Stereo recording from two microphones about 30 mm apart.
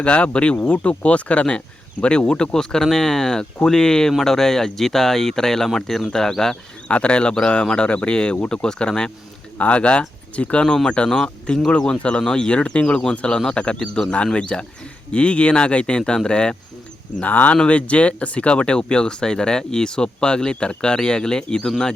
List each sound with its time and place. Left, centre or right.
0.0 s speech: left
0.6 s speech: left
0.9 s speech: left
2.5 s speech: left
6.8 s speech: left
9.6 s speech: left
10.8 s speech: left
12.3 s speech: left
12.5 s speech: left
13.1 s speech: left
14.3 s speech: left
17.2 s speech: left
17.7 s speech: left